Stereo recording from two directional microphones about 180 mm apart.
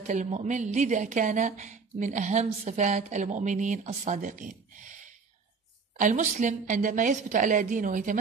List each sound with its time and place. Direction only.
0.0 s speech: 45° right (ahead or behind)